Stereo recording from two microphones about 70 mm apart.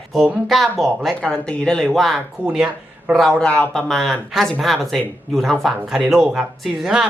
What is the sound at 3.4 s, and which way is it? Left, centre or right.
Speech, centre.